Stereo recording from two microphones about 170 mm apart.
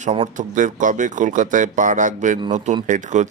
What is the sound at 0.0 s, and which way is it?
Speech, 40° right (ahead or behind).